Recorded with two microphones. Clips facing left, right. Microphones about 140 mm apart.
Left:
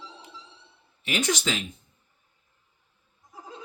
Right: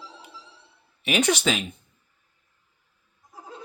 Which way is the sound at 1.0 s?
65° right (ahead or behind).